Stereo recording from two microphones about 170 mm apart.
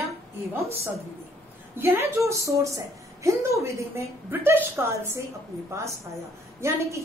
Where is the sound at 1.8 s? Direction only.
15° right (ahead or behind).